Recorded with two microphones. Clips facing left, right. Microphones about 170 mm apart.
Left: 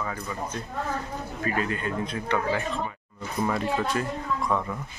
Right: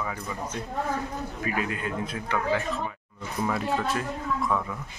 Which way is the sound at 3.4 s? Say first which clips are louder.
Left 1 dB; centre (ahead or behind).